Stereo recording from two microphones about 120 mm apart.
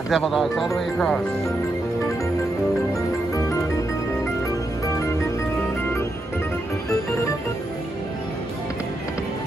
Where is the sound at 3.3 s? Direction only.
25° left (ahead or behind).